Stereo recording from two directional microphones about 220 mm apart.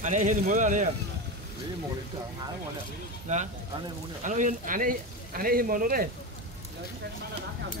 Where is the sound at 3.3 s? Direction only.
30° right (ahead or behind).